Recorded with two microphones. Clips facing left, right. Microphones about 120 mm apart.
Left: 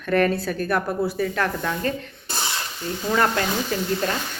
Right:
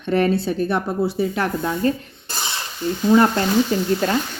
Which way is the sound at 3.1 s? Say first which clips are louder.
Right 6 dB; 25° right (ahead or behind).